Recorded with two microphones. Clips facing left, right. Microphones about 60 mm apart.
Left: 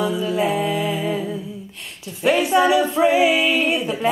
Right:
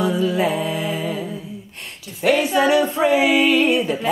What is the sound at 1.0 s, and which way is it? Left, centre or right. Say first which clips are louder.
Humming: left 2 dB; centre.